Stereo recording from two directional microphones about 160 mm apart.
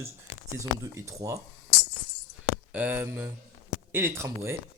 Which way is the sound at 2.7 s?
10° right (ahead or behind).